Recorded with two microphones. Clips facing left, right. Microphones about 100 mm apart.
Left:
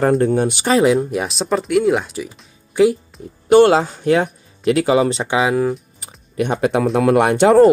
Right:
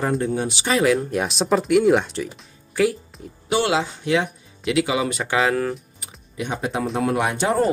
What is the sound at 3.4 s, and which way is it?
Speech, 45° left (ahead or behind).